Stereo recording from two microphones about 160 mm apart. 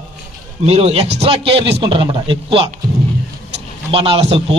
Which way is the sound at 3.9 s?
35° right (ahead or behind).